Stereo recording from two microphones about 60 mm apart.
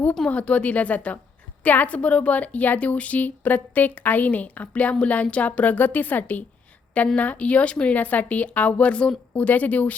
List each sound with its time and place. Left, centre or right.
0.3 s a woman's voice: left